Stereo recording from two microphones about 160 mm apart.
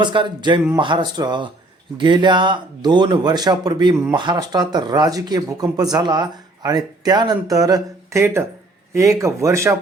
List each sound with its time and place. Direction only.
0.0 s speech: 30° right (ahead or behind)